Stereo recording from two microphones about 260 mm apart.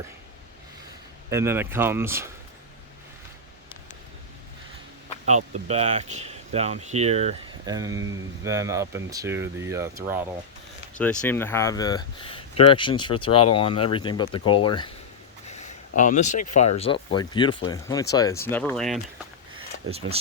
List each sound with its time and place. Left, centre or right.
1.3 s speech: centre
5.2 s speech: right; by 10.2 s centre
10.9 s speech: centre
15.4 s a sound: left
16.5 s speech: left; by 19.0 s centre